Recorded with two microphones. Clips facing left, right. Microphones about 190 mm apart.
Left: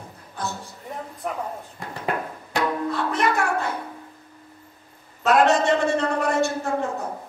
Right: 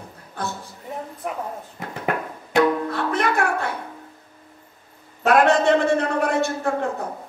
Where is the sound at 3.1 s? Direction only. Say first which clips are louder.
Right 2 dB; 60° right (ahead or behind).